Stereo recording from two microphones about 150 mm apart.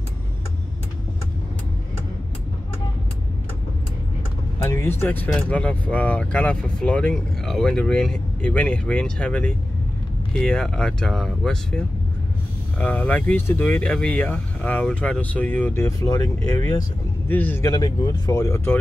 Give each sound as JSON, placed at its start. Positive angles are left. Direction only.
{"t": 4.6, "sound": "speech", "side_deg": 15}
{"t": 17.6, "sound": "speech", "side_deg": 25}